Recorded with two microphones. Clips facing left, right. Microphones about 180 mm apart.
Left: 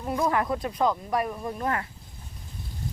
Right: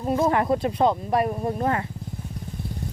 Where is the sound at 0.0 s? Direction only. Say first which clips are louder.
Right 4 dB; 25° right (ahead or behind).